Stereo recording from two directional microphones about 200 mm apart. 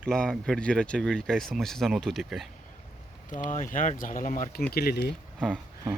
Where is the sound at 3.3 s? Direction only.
40° left (ahead or behind).